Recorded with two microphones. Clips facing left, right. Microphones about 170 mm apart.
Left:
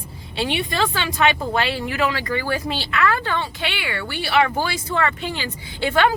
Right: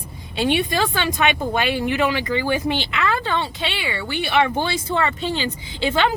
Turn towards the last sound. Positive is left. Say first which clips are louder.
# left 1 dB
turn(degrees=-25)  # may be behind; listen again after turning